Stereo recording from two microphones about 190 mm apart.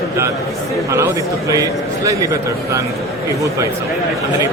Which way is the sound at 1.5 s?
15° right (ahead or behind).